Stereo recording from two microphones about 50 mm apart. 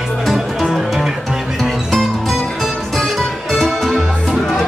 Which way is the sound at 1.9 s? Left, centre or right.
Centre.